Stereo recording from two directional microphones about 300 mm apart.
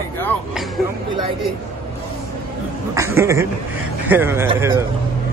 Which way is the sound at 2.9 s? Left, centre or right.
Centre.